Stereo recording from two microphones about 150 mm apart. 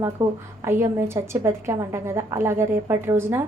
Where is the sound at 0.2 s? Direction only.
20° right (ahead or behind).